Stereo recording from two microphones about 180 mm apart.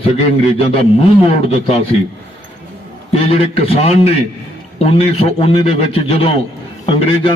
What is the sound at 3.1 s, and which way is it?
A man's voice, 35° left (ahead or behind).